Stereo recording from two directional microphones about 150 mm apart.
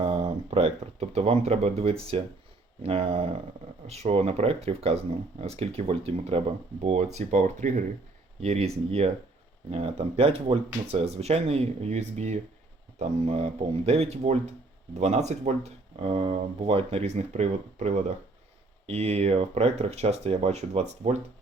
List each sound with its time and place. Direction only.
0.0 s speech: 35° right (ahead or behind)